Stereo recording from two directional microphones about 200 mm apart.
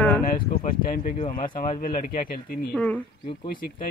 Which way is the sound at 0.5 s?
45° left (ahead or behind).